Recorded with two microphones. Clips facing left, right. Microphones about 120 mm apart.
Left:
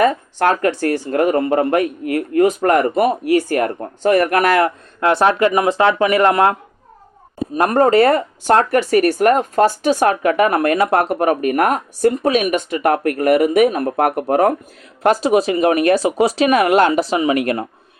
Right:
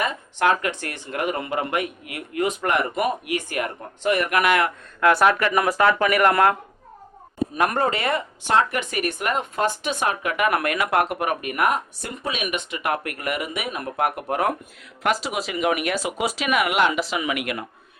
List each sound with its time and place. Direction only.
0.0 s speech: 40° left (ahead or behind); by 6.6 s 25° left (ahead or behind)
7.5 s speech: 40° left (ahead or behind)